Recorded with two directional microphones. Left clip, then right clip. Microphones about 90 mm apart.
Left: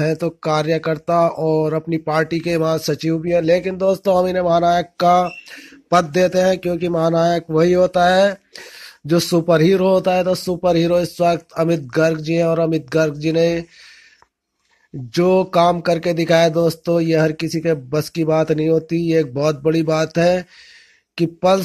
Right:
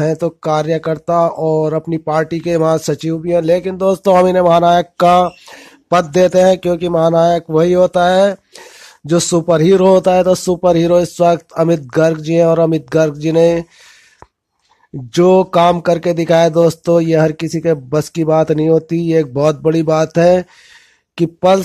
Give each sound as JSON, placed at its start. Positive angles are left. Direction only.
{"t": 0.0, "sound": "speech", "side_deg": -40}
{"t": 15.1, "sound": "speech", "side_deg": -50}